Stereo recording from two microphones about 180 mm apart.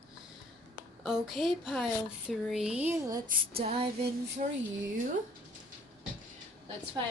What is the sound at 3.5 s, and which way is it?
Female singing, 35° right (ahead or behind).